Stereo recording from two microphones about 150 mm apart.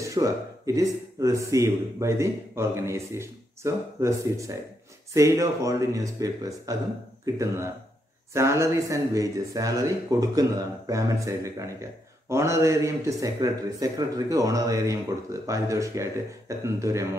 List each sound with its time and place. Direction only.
0.0 s speech: 20° right (ahead or behind)